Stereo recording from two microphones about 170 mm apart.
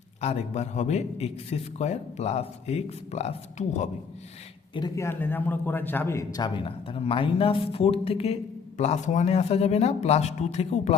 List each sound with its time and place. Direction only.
0.2 s a man's voice: 40° left (ahead or behind)
4.7 s a man's voice: 20° left (ahead or behind)
6.7 s a man's voice: 35° left (ahead or behind)